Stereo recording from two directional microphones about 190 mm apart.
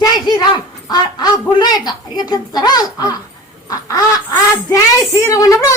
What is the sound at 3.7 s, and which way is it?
Duck, 15° left (ahead or behind).